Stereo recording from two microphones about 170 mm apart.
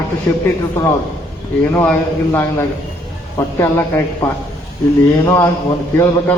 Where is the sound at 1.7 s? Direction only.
10° left (ahead or behind).